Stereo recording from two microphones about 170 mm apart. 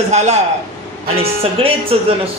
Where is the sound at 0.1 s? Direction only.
40° right (ahead or behind).